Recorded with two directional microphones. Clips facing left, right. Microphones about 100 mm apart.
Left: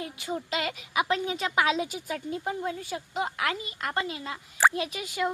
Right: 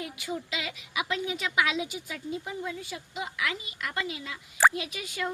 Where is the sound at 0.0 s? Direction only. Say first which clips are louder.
Left 2 dB; 35° left (ahead or behind).